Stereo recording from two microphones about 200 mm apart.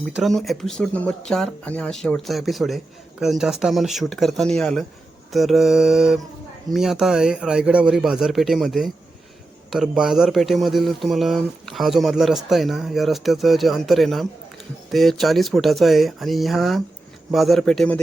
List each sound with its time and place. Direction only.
0.0 s speech: centre (ahead or behind)